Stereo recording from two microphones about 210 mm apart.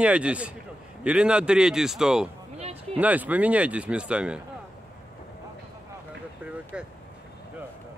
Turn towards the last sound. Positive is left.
turn(degrees=-5)  # may be behind; listen again after turning